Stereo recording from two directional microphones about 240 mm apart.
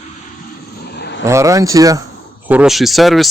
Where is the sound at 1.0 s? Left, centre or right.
Left.